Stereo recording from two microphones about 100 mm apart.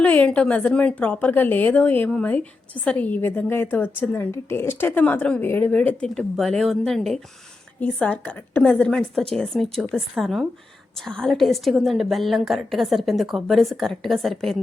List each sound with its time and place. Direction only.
0.0 s a woman's voice: 15° left (ahead or behind)
7.8 s a woman's voice: 15° left (ahead or behind)